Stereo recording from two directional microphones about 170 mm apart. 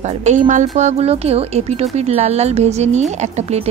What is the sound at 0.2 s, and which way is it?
Speech, 45° right (ahead or behind).